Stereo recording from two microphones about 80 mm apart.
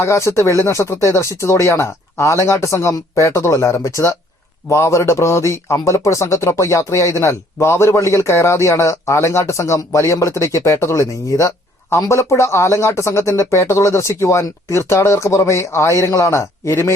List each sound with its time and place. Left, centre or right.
0.0 s speech: left